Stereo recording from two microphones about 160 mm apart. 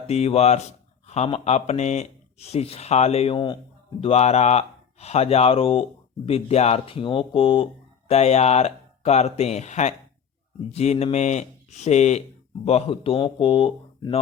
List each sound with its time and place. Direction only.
0.1 s speech: 40° left (ahead or behind)
4.0 s speech: 40° left (ahead or behind)